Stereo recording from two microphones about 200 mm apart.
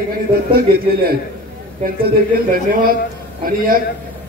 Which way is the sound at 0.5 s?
50° right (ahead or behind).